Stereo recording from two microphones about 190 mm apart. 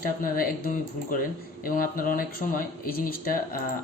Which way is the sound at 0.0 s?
50° left (ahead or behind).